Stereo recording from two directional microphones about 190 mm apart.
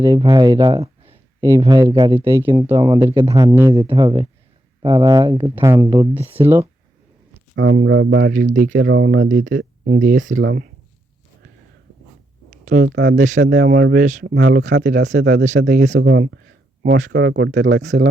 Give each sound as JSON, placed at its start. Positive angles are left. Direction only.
{"t": 0.0, "sound": "speech", "side_deg": -20}
{"t": 2.1, "sound": "speech", "side_deg": -10}
{"t": 5.6, "sound": "speech", "side_deg": -15}
{"t": 7.5, "sound": "speech", "side_deg": -65}
{"t": 8.3, "sound": "speech", "side_deg": -45}
{"t": 8.8, "sound": "speech", "side_deg": -65}
{"t": 9.8, "sound": "speech", "side_deg": -45}
{"t": 12.8, "sound": "speech", "side_deg": -65}
{"t": 13.1, "sound": "speech", "side_deg": -40}
{"t": 13.4, "sound": "speech", "side_deg": -60}
{"t": 14.3, "sound": "speech", "side_deg": -60}
{"t": 15.4, "sound": "speech", "side_deg": -40}
{"t": 16.0, "sound": "speech", "side_deg": -60}